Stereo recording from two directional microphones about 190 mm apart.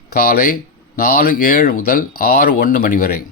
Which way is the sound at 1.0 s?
55° left (ahead or behind).